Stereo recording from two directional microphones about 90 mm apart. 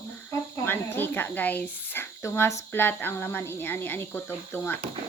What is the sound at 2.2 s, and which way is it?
Speech, 30° left (ahead or behind).